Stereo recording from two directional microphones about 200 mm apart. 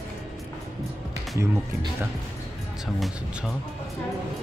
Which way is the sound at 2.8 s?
5° right (ahead or behind).